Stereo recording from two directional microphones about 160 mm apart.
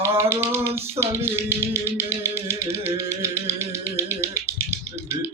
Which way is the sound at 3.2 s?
15° right (ahead or behind).